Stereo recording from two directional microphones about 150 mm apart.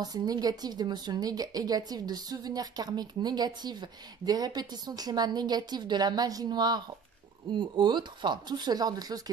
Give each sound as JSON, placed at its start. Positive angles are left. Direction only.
{"t": 0.0, "sound": "a woman's voice", "side_deg": -25}